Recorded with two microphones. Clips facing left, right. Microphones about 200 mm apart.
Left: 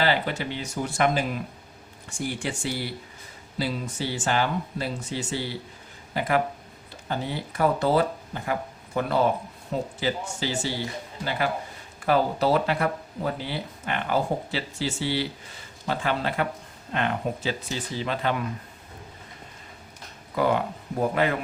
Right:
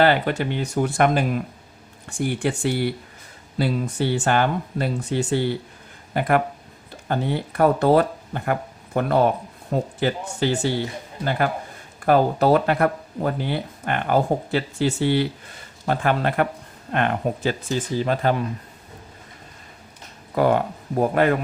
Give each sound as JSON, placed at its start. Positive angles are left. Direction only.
{"t": 0.0, "sound": "speech", "side_deg": -55}
{"t": 20.3, "sound": "speech", "side_deg": -50}